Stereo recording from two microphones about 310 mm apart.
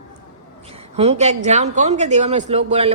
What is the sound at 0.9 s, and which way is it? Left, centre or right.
A woman's voice, right.